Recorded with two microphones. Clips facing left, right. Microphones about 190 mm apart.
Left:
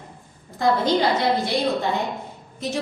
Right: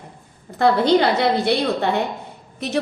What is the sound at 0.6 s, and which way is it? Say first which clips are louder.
A woman's voice: right 4 dB; 65° right (ahead or behind).